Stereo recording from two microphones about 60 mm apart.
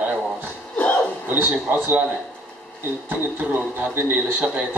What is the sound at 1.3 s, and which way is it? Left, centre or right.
Speech, right.